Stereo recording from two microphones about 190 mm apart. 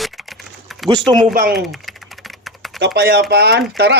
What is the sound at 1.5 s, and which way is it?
Typing, centre (ahead or behind).